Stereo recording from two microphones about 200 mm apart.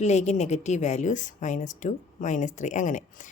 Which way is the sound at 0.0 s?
35° left (ahead or behind).